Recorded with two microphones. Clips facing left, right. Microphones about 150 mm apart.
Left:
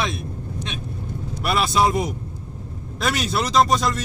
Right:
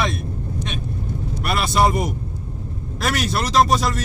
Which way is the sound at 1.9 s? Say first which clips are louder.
Even; centre (ahead or behind).